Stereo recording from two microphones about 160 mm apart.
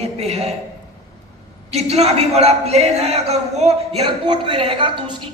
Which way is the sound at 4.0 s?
30° right (ahead or behind).